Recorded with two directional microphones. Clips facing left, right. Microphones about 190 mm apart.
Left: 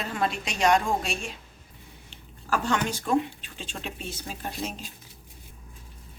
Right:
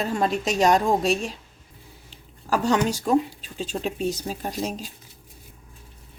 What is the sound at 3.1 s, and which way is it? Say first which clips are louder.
A woman's voice: right 4 dB; 40° right (ahead or behind).